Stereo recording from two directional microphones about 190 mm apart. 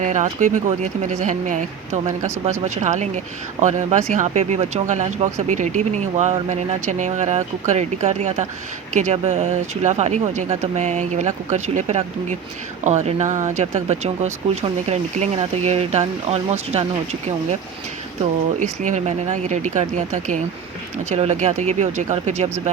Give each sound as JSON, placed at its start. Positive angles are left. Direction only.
{"t": 0.0, "sound": "speech", "side_deg": -40}
{"t": 2.2, "sound": "speech", "side_deg": -15}
{"t": 2.6, "sound": "speech", "side_deg": -40}
{"t": 18.2, "sound": "speech", "side_deg": -40}